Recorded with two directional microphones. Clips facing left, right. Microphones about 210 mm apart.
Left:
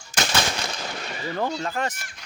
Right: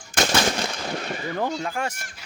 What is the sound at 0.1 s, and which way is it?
Gunshot, 55° right (ahead or behind).